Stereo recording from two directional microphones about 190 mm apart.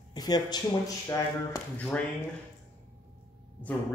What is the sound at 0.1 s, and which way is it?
Speech, 20° left (ahead or behind).